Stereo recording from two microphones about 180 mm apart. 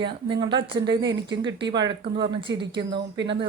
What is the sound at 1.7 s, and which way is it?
Speech, 25° right (ahead or behind).